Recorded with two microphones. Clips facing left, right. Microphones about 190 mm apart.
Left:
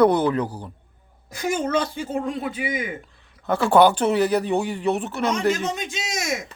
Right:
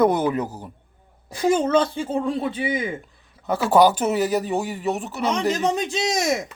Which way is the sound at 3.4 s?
5° right (ahead or behind).